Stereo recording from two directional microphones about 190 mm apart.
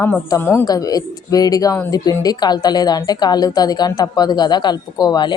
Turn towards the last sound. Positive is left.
turn(degrees=20)  # may be behind; listen again after turning